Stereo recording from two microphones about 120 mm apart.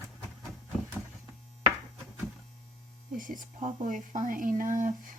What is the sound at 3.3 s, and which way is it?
Speech, 90° right.